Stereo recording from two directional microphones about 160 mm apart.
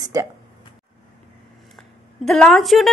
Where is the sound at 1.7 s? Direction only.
5° left (ahead or behind).